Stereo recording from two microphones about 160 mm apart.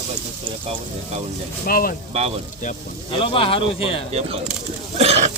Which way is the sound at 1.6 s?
65° left (ahead or behind).